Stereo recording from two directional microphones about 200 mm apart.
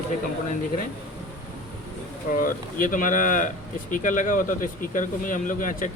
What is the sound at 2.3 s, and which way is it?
Speech, 45° left (ahead or behind).